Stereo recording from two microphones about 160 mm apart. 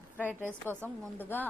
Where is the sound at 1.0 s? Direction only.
10° left (ahead or behind).